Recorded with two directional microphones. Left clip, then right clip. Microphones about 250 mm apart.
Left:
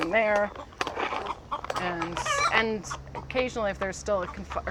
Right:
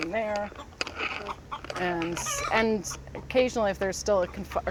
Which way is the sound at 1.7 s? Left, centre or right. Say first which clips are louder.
Right 3 dB; centre.